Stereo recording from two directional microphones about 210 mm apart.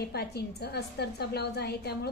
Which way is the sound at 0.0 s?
50° left (ahead or behind).